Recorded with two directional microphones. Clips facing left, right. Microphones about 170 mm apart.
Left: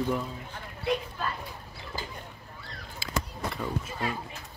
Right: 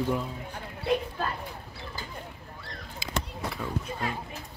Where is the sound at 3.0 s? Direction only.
20° right (ahead or behind).